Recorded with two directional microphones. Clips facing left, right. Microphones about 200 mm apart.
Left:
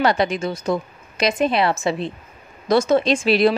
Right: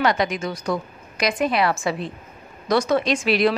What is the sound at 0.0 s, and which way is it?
A woman's voice, 30° left (ahead or behind).